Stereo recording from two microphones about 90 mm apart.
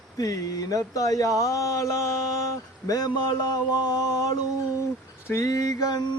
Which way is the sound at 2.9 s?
50° left (ahead or behind).